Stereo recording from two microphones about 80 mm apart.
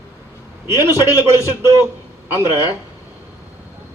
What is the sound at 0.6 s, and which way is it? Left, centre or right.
A man's voice, right.